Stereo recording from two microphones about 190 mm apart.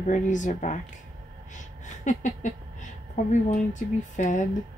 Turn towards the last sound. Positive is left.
turn(degrees=40)  # may be behind; listen again after turning